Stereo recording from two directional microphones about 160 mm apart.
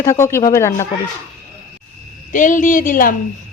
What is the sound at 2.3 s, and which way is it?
Speech, 55° left (ahead or behind).